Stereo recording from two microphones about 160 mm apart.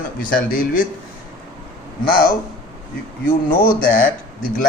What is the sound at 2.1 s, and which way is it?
Speech, 70° left (ahead or behind).